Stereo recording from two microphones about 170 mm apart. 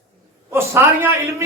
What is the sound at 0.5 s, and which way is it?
Speech, 15° right (ahead or behind).